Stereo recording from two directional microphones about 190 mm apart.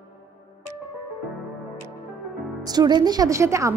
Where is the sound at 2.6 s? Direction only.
20° right (ahead or behind).